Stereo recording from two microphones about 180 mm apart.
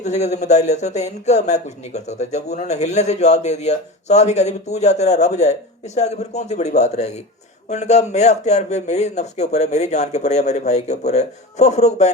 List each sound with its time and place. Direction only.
0.0 s speech: 40° left (ahead or behind)